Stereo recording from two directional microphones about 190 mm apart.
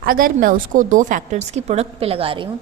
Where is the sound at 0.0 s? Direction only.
50° right (ahead or behind).